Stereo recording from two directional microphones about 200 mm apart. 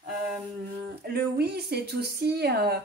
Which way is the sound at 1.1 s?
50° right (ahead or behind).